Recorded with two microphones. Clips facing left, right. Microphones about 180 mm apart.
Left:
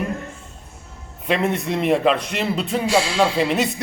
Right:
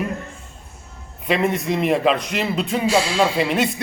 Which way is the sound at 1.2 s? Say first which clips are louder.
Right 1 dB; centre (ahead or behind).